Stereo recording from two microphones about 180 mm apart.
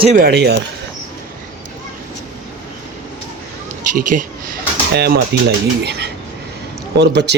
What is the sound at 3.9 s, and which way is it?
Speech, 45° right (ahead or behind).